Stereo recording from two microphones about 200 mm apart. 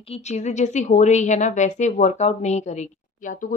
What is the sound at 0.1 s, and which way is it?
A woman's voice, 35° left (ahead or behind).